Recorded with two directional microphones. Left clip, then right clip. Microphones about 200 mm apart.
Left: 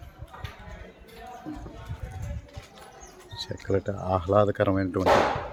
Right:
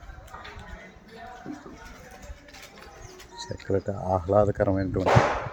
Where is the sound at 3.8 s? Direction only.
5° right (ahead or behind).